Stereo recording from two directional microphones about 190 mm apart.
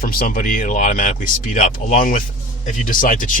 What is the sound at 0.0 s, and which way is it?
Speech, 50° left (ahead or behind).